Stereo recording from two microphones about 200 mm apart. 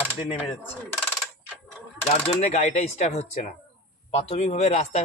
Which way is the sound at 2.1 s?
35° left (ahead or behind).